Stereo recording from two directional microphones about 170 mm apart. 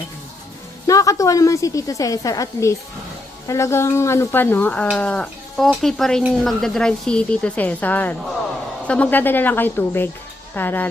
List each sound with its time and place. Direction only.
0.9 s a woman's voice: 20° left (ahead or behind)